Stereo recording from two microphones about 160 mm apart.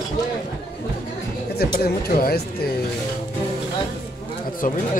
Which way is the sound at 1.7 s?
65° left (ahead or behind).